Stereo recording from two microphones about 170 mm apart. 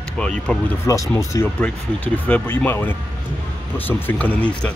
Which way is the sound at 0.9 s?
20° left (ahead or behind).